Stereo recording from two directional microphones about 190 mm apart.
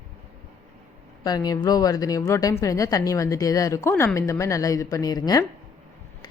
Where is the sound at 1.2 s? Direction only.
20° left (ahead or behind).